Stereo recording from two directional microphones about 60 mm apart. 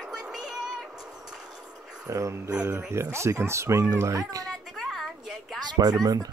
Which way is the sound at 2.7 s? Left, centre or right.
Right.